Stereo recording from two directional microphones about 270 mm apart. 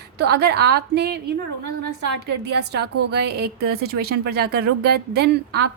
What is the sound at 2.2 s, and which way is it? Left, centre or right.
A woman's voice, right.